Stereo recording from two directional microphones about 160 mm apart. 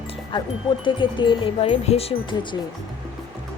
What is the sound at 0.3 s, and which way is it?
Speech, 30° left (ahead or behind).